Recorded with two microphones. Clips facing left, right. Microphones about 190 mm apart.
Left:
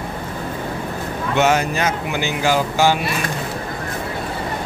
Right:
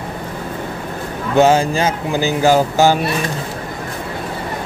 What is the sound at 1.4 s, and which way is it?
Speech, 30° right (ahead or behind).